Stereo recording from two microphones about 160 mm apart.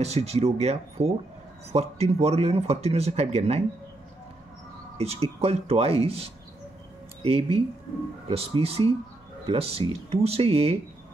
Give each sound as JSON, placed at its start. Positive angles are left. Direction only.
{"t": 0.0, "sound": "speech", "side_deg": -40}
{"t": 4.9, "sound": "speech", "side_deg": -40}